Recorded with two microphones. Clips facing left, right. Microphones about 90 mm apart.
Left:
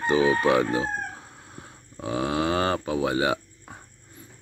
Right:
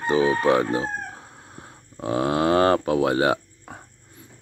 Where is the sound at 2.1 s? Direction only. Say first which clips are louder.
Right 5 dB; 50° right (ahead or behind).